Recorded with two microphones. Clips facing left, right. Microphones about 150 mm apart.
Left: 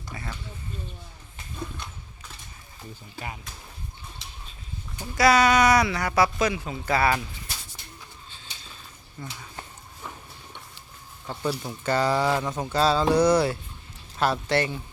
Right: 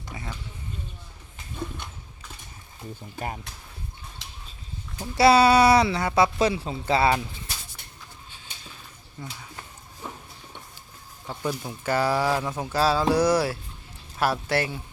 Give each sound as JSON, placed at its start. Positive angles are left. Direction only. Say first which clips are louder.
{"t": 0.1, "sound": "speech", "louder": "even", "side_deg": -15}
{"t": 3.2, "sound": "speech", "louder": "right 4 dB", "side_deg": -45}
{"t": 4.2, "sound": "bird", "louder": "even", "side_deg": -90}
{"t": 5.1, "sound": "speech", "louder": "right 3 dB", "side_deg": -30}
{"t": 9.2, "sound": "speech", "louder": "even", "side_deg": -10}
{"t": 11.3, "sound": "speech", "louder": "left 1 dB", "side_deg": -10}